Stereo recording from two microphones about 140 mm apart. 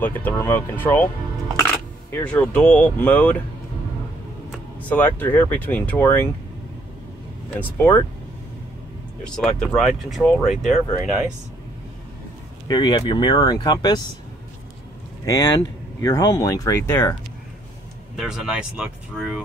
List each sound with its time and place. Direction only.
0.0 s speech: 15° left (ahead or behind)
4.7 s speech: 10° left (ahead or behind)
9.2 s speech: 5° left (ahead or behind)
12.6 s speech: 30° left (ahead or behind)
15.2 s speech: 25° left (ahead or behind)
18.1 s speech: 5° right (ahead or behind)